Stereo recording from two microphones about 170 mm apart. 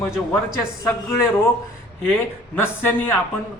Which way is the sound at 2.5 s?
15° left (ahead or behind).